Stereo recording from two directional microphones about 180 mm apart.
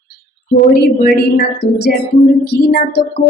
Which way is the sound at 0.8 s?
55° left (ahead or behind).